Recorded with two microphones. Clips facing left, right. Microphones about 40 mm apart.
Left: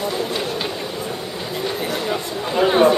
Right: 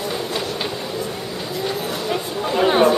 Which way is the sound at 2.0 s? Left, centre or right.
Centre.